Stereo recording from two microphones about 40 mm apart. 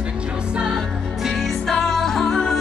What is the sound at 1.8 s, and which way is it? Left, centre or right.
Music, centre.